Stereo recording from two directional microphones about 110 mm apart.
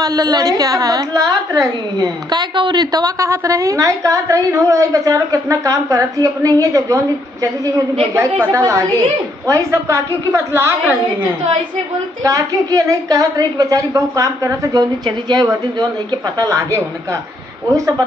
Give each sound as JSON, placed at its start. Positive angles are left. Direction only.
{"t": 0.0, "sound": "a woman's voice", "side_deg": -35}
{"t": 8.1, "sound": "a woman's voice", "side_deg": -25}
{"t": 12.2, "sound": "a woman's voice", "side_deg": -30}
{"t": 16.3, "sound": "a woman's voice", "side_deg": -30}